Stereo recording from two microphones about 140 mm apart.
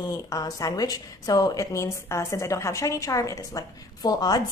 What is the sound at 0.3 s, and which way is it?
A woman's voice, 25° left (ahead or behind).